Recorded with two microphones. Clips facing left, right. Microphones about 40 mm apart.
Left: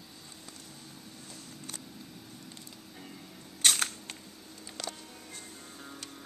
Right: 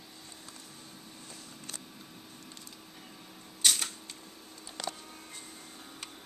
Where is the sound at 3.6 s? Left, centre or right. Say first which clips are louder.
Left 2 dB; left.